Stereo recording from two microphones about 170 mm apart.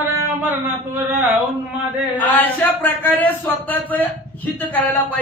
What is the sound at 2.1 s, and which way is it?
Speech, 10° left (ahead or behind).